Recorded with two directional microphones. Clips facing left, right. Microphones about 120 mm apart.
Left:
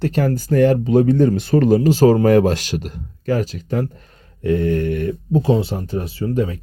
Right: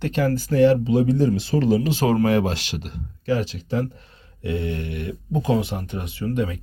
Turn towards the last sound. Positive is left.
turn(degrees=35)  # may be behind; listen again after turning